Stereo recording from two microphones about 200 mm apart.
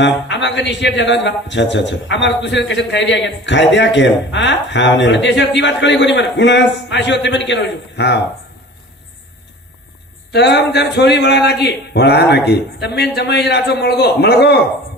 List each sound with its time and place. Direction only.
0.0 s a man's voice: 65° left (ahead or behind)
10.3 s a man's voice: 55° left (ahead or behind)